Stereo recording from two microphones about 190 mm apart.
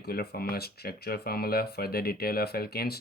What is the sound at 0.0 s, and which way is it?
Speech, 55° left (ahead or behind).